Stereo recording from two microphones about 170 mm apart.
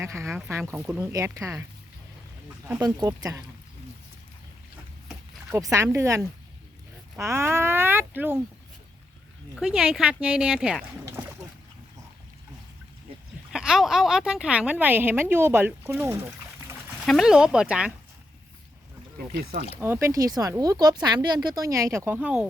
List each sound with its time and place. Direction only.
0.0 s a woman's voice: 15° right (ahead or behind)
0.3 s speech: 5° right (ahead or behind)
0.7 s a woman's voice: 15° right (ahead or behind)
2.6 s speech: 20° right (ahead or behind)
5.7 s a woman's voice: 15° right (ahead or behind)
9.6 s speech: centre (ahead or behind)
11.0 s speech: 15° right (ahead or behind)
13.5 s a woman's voice: 5° right (ahead or behind)
17.1 s speech: centre (ahead or behind)
19.4 s speech: 65° right (ahead or behind)
19.8 s speech: 15° right (ahead or behind)